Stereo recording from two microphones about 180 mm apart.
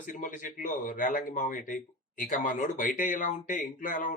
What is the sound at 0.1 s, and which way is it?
A man's voice, 45° left (ahead or behind).